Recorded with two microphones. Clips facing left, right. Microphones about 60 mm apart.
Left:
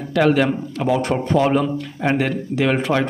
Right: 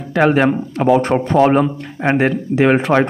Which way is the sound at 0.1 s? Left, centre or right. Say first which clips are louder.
Right 3 dB; right.